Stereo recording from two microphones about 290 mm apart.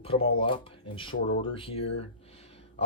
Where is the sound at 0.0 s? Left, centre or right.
Centre.